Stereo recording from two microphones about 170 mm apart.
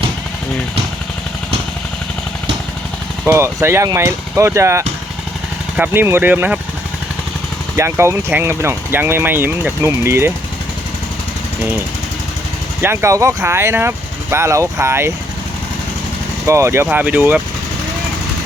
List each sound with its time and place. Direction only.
3.2 s speech: 15° right (ahead or behind)
7.8 s speech: 15° right (ahead or behind)
12.8 s speech: 15° right (ahead or behind)
16.5 s speech: 15° right (ahead or behind)